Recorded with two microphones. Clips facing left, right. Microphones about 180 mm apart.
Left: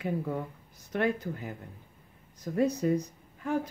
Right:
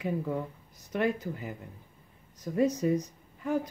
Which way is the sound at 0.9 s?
10° right (ahead or behind).